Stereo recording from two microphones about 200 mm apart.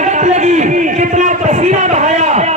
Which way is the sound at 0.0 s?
35° right (ahead or behind).